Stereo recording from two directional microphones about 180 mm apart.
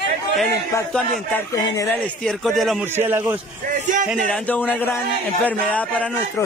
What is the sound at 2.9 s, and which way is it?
Speech, 10° right (ahead or behind).